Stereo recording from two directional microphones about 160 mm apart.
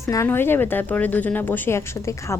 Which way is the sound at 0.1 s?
15° left (ahead or behind).